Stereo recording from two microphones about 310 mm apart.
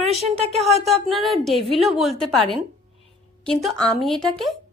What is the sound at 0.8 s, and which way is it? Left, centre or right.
A woman's voice, centre.